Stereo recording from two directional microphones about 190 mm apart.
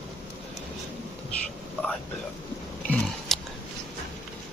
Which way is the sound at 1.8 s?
10° left (ahead or behind).